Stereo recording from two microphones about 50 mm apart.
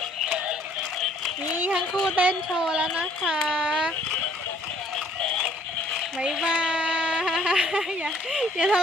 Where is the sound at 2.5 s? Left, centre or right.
Centre.